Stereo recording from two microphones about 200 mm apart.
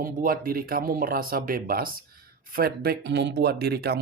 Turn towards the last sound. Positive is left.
turn(degrees=-55)  # may be behind; listen again after turning